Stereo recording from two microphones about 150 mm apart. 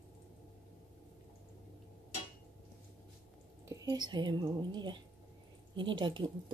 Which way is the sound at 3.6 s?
25° right (ahead or behind).